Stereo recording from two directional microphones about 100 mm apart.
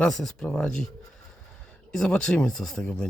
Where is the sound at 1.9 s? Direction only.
5° left (ahead or behind).